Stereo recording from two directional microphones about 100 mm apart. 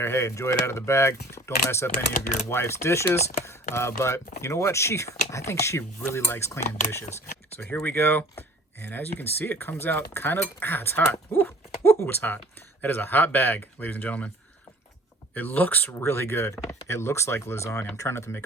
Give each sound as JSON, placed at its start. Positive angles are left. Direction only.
{"t": 0.0, "sound": "speech", "side_deg": 30}
{"t": 15.5, "sound": "speech", "side_deg": 20}